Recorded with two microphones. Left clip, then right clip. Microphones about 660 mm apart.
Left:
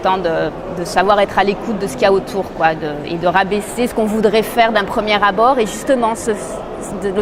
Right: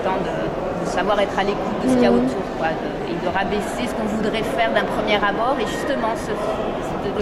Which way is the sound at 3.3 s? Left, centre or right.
Left.